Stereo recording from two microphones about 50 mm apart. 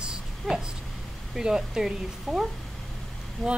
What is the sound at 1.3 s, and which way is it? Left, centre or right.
A woman's voice, centre.